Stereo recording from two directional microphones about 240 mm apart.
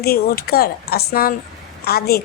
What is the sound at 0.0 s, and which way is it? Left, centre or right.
A woman's voice, left.